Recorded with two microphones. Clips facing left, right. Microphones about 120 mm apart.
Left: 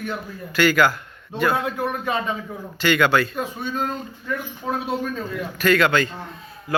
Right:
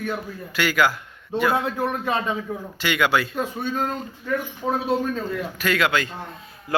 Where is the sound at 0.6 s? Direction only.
5° right (ahead or behind).